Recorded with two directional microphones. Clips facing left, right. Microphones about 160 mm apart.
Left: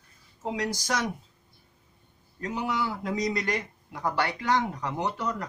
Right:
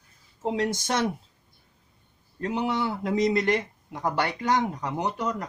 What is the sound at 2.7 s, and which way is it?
Speech, 25° right (ahead or behind).